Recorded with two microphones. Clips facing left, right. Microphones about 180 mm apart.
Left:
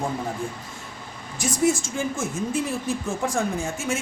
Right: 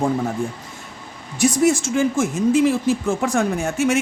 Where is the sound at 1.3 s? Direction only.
75° right (ahead or behind).